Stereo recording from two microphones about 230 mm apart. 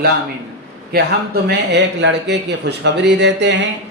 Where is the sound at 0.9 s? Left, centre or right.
Right.